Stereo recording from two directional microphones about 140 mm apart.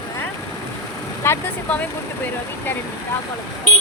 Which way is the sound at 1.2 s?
20° left (ahead or behind).